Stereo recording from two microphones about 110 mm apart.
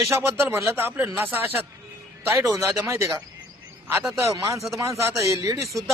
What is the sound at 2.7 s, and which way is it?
A man's voice, 25° right (ahead or behind).